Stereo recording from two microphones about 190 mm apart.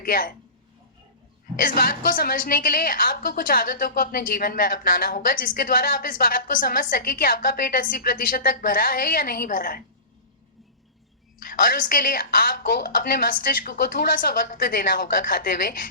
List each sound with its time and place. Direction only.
0.0 s a woman's voice: 50° left (ahead or behind)
1.5 s a woman's voice: 50° left (ahead or behind)
11.4 s a woman's voice: 50° left (ahead or behind)